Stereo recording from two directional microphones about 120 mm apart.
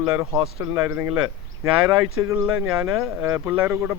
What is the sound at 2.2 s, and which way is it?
Speech, 20° right (ahead or behind).